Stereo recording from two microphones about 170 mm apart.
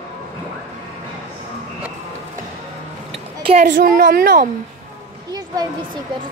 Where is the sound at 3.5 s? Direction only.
50° right (ahead or behind).